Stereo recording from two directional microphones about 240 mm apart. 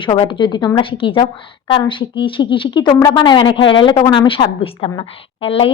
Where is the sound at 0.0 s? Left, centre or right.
Left.